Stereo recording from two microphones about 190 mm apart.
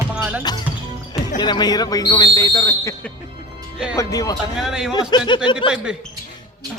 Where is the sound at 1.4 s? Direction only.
20° left (ahead or behind).